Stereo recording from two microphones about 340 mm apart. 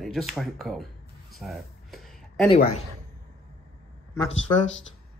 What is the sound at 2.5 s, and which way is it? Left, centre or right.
Speech, centre.